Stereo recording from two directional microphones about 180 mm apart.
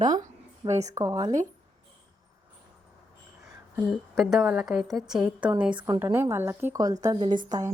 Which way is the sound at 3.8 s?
Centre (ahead or behind).